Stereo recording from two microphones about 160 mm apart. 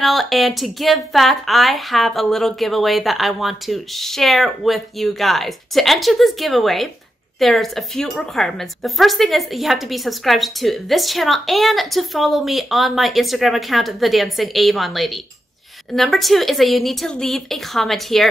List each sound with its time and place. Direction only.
0.0 s speech: centre (ahead or behind)